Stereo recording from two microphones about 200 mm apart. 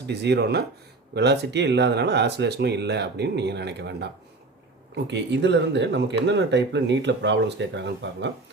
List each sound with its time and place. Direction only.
0.1 s speech: 55° right (ahead or behind)